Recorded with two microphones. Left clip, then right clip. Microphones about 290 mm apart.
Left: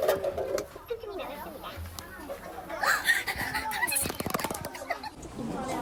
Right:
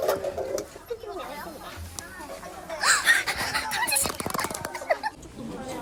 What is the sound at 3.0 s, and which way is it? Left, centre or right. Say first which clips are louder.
Dog: right 5 dB; right.